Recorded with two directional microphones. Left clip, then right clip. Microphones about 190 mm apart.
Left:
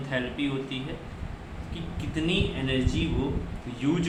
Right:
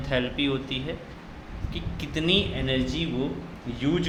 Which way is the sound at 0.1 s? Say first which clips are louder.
Right 4 dB; 40° right (ahead or behind).